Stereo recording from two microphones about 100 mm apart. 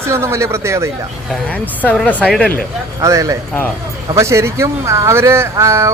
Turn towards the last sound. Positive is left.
turn(degrees=-30)  # may be behind; listen again after turning